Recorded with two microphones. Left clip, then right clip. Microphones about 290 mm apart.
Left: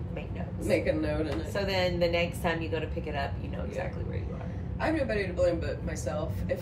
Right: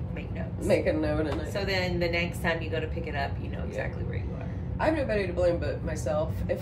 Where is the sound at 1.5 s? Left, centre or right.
Centre.